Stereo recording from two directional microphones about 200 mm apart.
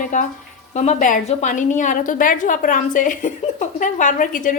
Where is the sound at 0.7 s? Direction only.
35° left (ahead or behind).